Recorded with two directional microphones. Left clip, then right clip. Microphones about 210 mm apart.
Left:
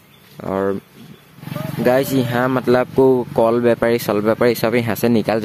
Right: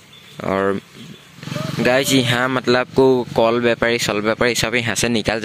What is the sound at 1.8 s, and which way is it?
Speech, centre (ahead or behind).